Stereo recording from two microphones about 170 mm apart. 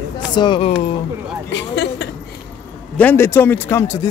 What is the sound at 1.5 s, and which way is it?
Speech, 90° left.